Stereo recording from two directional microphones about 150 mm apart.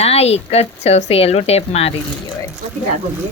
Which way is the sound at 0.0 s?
45° left (ahead or behind).